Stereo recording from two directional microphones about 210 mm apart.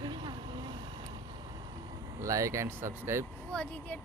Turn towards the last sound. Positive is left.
turn(degrees=5)  # may be behind; listen again after turning